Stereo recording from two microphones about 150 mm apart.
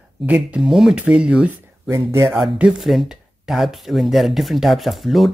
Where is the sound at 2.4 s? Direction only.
5° right (ahead or behind).